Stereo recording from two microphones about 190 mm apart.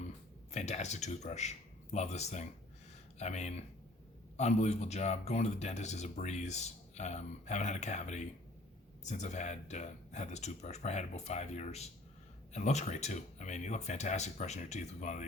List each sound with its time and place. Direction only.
0.5 s speech: 35° left (ahead or behind)